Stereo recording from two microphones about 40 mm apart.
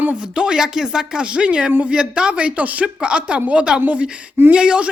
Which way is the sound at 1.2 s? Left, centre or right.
Right.